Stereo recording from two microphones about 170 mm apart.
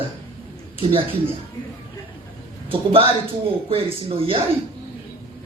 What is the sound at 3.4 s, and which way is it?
Speech, 35° right (ahead or behind).